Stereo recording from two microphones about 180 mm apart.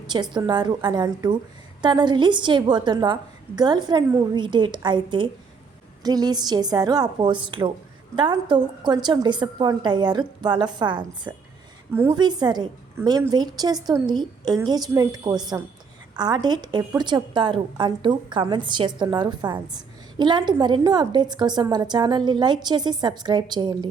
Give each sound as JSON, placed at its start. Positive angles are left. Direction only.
{"t": 0.1, "sound": "a woman's voice", "side_deg": -25}